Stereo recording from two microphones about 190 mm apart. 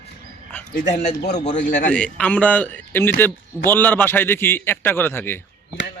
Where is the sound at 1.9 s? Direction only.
5° left (ahead or behind).